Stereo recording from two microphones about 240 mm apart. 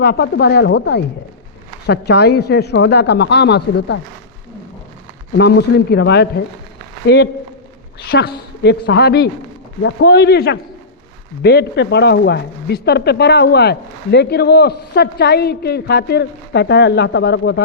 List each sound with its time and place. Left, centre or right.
0.0 s speech: left
5.4 s speech: left
8.1 s speech: left